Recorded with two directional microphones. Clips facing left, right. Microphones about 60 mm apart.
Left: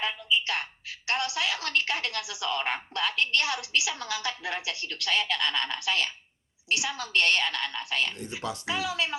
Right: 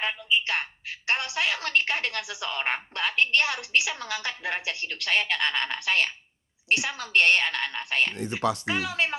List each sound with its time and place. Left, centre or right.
0.0 s a woman's voice: right
8.1 s speech: right
8.6 s a woman's voice: right